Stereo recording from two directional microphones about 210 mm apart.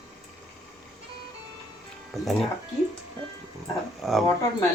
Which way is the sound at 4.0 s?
Centre (ahead or behind).